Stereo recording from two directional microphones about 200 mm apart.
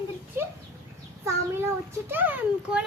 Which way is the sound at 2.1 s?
10° right (ahead or behind).